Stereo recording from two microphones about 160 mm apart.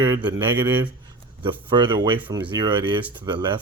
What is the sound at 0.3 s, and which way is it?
Speech, 25° right (ahead or behind).